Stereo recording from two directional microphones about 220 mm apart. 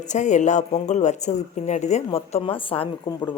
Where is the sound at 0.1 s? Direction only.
35° left (ahead or behind).